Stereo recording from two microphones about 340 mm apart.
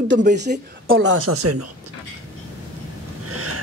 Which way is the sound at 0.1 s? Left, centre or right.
Right.